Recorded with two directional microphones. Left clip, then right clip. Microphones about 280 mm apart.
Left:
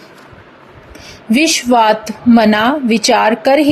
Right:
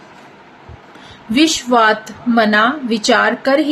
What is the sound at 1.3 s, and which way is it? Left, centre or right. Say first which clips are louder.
A woman's voice: left 2 dB; left.